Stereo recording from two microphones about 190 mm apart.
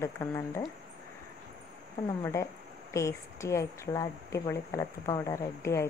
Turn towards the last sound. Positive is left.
turn(degrees=15)  # may be behind; listen again after turning